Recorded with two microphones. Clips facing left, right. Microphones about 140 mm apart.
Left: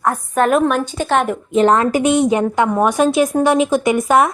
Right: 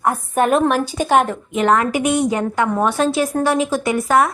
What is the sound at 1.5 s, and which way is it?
A woman's voice, 30° left (ahead or behind).